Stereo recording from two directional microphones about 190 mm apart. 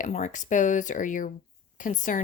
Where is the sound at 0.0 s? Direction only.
40° left (ahead or behind).